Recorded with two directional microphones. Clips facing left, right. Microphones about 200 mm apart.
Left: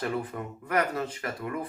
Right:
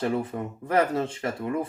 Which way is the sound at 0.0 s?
25° right (ahead or behind).